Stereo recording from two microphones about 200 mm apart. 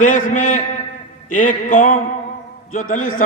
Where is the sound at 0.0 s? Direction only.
40° left (ahead or behind).